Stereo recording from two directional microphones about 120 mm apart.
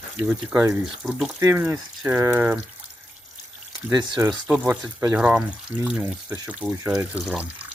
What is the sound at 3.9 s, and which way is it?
Speech, 35° right (ahead or behind).